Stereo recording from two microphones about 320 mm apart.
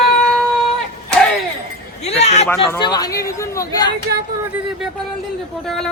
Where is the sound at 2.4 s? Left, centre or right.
Centre.